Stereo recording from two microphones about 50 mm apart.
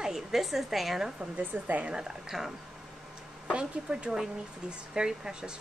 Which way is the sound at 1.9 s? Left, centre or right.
Centre.